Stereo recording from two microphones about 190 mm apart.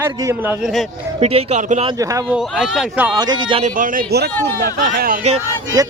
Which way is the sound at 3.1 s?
20° right (ahead or behind).